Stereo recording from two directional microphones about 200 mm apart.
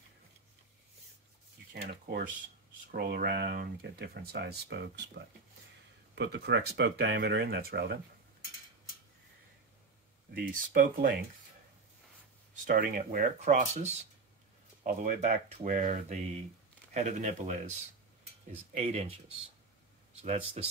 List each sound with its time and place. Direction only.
1.7 s speech: 50° right (ahead or behind)
10.3 s speech: 50° right (ahead or behind)
12.6 s speech: 45° right (ahead or behind)
18.8 s speech: 30° right (ahead or behind)